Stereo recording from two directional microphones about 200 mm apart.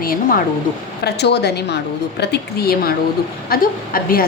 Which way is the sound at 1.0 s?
55° left (ahead or behind).